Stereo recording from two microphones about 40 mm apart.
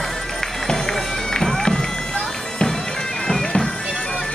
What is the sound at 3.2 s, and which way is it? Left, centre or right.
Bagpipes, centre.